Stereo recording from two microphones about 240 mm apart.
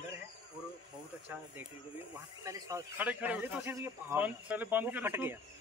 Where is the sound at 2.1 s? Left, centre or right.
Centre.